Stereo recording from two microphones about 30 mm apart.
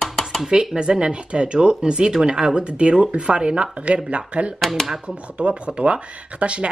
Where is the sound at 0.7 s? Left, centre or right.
Right.